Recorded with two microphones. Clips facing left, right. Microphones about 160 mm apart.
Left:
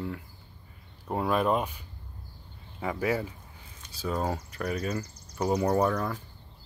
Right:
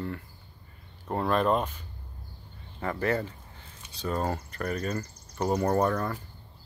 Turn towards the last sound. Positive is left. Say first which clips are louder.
# even
turn(degrees=0)  # may be behind; listen again after turning